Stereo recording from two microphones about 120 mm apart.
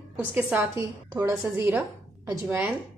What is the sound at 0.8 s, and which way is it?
A woman's voice, 25° right (ahead or behind).